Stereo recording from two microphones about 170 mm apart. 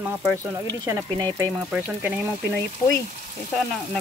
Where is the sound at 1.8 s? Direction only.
5° right (ahead or behind).